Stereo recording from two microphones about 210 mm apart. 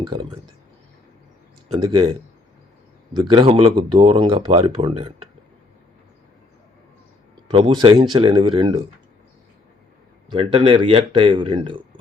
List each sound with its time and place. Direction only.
0.0 s speech: 25° right (ahead or behind)
1.6 s speech: 25° right (ahead or behind)
3.2 s speech: 20° right (ahead or behind)
7.5 s speech: 25° right (ahead or behind)
10.2 s speech: 20° right (ahead or behind)